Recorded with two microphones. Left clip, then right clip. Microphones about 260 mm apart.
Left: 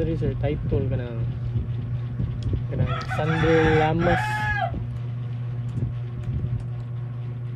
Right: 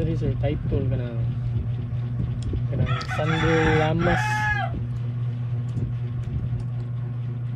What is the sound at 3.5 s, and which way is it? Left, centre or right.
Speech, left.